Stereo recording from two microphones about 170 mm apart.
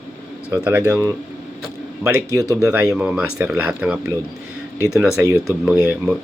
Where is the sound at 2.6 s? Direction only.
5° right (ahead or behind).